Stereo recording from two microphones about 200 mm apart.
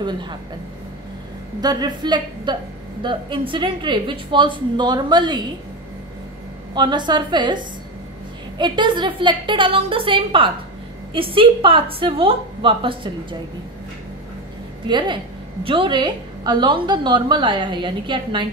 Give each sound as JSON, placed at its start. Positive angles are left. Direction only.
{"t": 0.0, "sound": "a woman's voice", "side_deg": -20}
{"t": 1.6, "sound": "a woman's voice", "side_deg": -20}
{"t": 6.7, "sound": "a woman's voice", "side_deg": -25}
{"t": 14.9, "sound": "a woman's voice", "side_deg": -20}